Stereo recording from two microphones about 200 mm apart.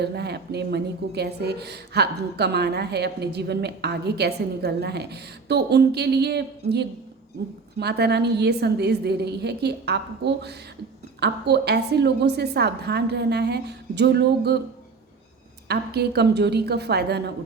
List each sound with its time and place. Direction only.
0.0 s a woman's voice: 55° right (ahead or behind)
7.8 s a woman's voice: 55° right (ahead or behind)
15.6 s a woman's voice: 55° right (ahead or behind)